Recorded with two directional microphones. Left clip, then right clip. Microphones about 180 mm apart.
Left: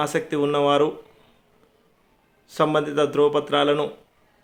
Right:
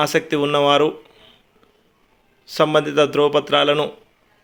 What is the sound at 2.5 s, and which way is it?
A man's voice, 25° right (ahead or behind).